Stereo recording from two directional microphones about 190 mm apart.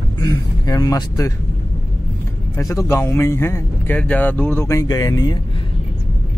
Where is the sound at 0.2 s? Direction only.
20° left (ahead or behind).